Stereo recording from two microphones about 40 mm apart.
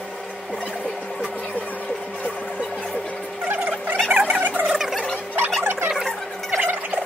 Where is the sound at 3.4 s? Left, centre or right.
Right.